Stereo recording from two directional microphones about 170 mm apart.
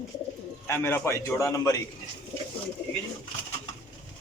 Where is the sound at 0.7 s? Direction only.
15° left (ahead or behind).